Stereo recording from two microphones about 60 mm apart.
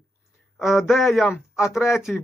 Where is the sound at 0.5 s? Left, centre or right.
Centre.